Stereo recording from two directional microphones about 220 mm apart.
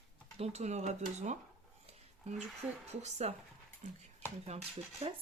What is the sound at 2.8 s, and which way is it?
Speech, 30° right (ahead or behind).